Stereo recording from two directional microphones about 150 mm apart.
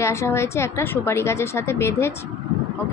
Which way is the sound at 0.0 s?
20° left (ahead or behind).